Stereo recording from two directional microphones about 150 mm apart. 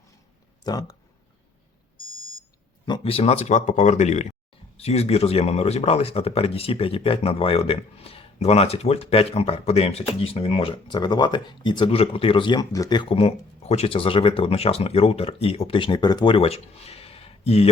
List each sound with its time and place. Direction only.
0.6 s speech: 25° left (ahead or behind)
2.8 s speech: 35° left (ahead or behind)